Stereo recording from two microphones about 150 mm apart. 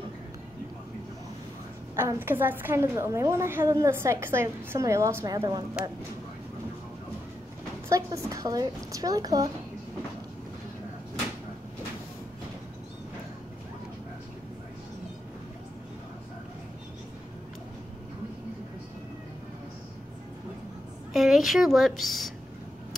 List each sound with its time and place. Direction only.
2.0 s a woman's voice: 15° right (ahead or behind)
7.9 s a woman's voice: 20° right (ahead or behind)
21.1 s a woman's voice: centre (ahead or behind)